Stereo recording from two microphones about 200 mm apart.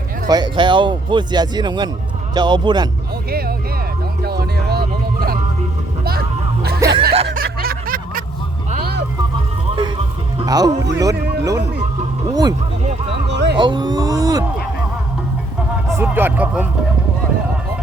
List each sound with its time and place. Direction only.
0.3 s speech: 20° right (ahead or behind)
4.2 s music: 50° right (ahead or behind)
6.7 s speech: 15° right (ahead or behind)
7.3 s snicker: 50° right (ahead or behind)
8.8 s music: 55° right (ahead or behind)
10.3 s music: 20° right (ahead or behind)
10.9 s speech: 15° right (ahead or behind)
13.3 s a sound: 60° right (ahead or behind)
13.6 s speech: 20° right (ahead or behind)
16.0 s speech: 10° right (ahead or behind)